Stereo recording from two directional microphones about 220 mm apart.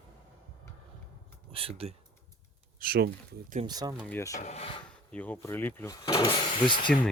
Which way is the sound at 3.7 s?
20° right (ahead or behind).